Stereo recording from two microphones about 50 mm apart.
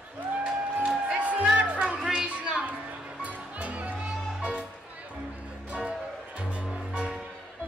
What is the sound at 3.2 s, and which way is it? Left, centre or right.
Music, right.